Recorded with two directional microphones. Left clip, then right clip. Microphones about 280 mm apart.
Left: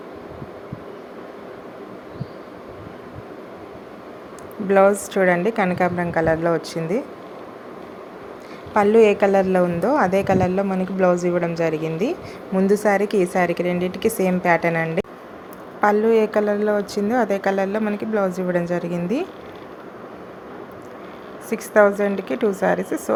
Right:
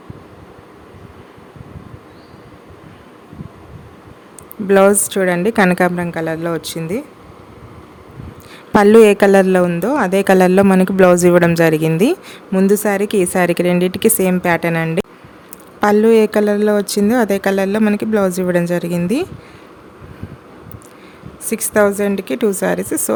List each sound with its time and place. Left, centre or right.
4.7 s a man's voice: right
6.1 s a woman's voice: right
8.7 s a man's voice: right
21.5 s a woman's voice: right
22.7 s a woman's voice: right